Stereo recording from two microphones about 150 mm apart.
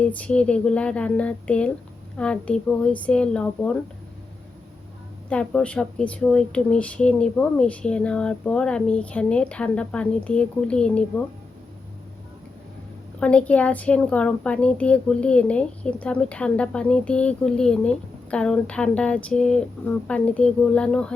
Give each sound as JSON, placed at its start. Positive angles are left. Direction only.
{"t": 0.0, "sound": "a woman's voice", "side_deg": 10}
{"t": 5.3, "sound": "a woman's voice", "side_deg": 10}
{"t": 13.1, "sound": "a woman's voice", "side_deg": 5}